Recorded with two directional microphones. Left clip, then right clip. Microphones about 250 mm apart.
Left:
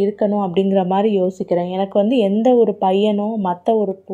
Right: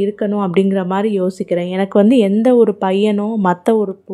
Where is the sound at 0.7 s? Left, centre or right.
Centre.